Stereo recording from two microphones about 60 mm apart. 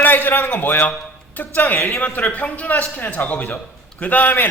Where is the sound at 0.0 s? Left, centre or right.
Left.